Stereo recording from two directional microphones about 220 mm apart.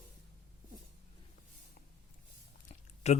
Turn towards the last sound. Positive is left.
turn(degrees=30)  # may be behind; listen again after turning